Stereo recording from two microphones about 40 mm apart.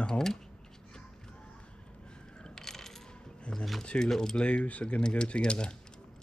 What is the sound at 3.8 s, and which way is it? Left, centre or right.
Speech, centre.